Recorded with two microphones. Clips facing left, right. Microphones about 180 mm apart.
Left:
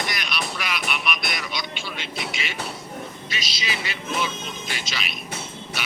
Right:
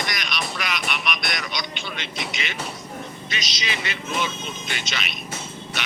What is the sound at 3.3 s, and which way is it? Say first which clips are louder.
Speech: right 1 dB; 5° left (ahead or behind).